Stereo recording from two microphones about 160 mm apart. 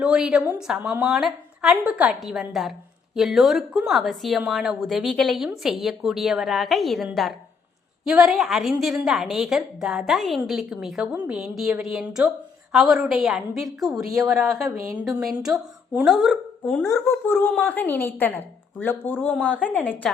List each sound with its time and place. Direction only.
0.0 s a woman's voice: 5° right (ahead or behind)
14.6 s a woman's voice: 15° right (ahead or behind)
16.0 s a woman's voice: centre (ahead or behind)
16.7 s a woman's voice: 10° left (ahead or behind)